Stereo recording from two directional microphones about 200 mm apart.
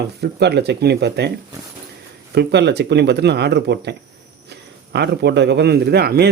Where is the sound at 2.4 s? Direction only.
55° right (ahead or behind).